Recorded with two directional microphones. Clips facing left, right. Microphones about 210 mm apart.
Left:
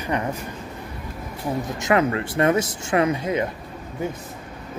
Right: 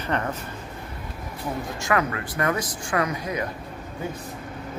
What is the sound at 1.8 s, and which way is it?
Speech, 25° left (ahead or behind).